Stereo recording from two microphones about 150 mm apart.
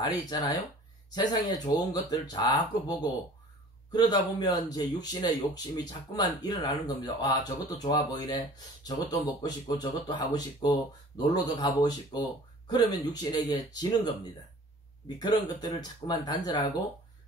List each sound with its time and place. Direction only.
0.0 s speech: 30° left (ahead or behind)
15.1 s speech: 25° left (ahead or behind)